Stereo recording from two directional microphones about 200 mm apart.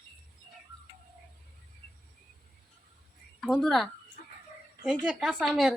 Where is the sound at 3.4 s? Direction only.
Centre (ahead or behind).